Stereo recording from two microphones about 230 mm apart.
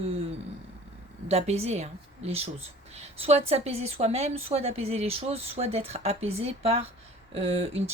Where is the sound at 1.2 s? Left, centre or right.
Right.